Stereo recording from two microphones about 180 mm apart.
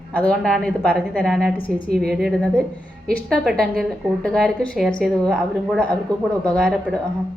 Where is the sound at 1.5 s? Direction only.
30° left (ahead or behind).